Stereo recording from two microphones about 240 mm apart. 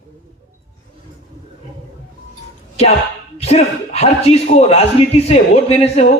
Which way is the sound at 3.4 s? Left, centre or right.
Left.